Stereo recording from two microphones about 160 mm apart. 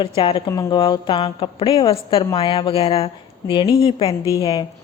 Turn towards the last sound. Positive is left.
turn(degrees=25)  # may be behind; listen again after turning